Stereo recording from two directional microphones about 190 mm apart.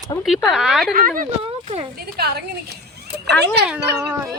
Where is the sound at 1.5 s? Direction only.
30° right (ahead or behind).